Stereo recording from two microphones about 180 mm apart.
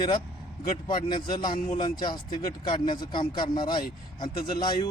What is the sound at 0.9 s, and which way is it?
Speech, 25° left (ahead or behind).